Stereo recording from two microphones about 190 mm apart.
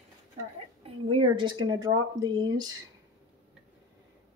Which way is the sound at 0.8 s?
30° right (ahead or behind).